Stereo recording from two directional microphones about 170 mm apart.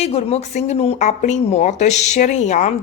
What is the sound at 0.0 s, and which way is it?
A woman's voice, 35° left (ahead or behind).